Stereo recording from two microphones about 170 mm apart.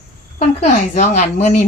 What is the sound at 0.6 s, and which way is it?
Speech, 40° left (ahead or behind).